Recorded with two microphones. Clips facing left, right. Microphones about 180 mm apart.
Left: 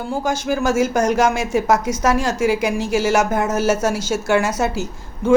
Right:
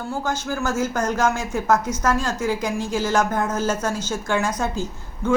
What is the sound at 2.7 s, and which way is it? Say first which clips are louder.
Speech: left 5 dB; 80° left.